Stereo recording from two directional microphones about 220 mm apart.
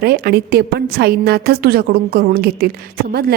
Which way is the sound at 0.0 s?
45° right (ahead or behind).